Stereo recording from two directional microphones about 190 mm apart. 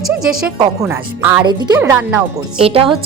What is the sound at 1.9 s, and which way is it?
Speech, 5° right (ahead or behind).